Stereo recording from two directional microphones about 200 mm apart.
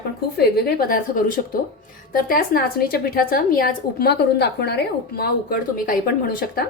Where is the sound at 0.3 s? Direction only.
50° left (ahead or behind).